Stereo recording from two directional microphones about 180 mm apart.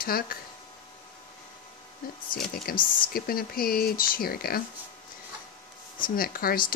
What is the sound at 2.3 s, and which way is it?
Speech, 55° left (ahead or behind).